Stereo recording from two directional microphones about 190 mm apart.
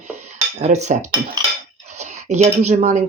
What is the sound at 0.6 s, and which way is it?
Speech, 35° right (ahead or behind).